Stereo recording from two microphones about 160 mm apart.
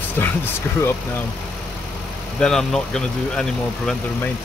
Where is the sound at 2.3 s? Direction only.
5° left (ahead or behind).